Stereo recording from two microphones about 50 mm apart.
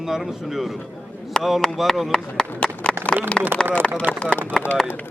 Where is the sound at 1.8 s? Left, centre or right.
Centre.